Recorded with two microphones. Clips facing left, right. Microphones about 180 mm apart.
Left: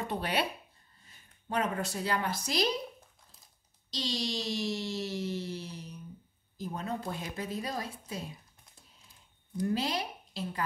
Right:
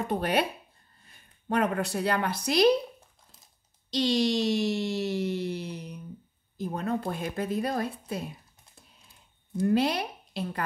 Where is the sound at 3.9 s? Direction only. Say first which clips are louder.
Right 10 dB; 60° right (ahead or behind).